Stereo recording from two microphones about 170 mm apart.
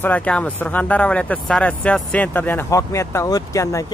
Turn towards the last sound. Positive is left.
turn(degrees=20)  # may be behind; listen again after turning